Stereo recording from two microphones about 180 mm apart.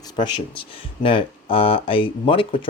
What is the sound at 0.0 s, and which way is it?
Speech, 25° left (ahead or behind).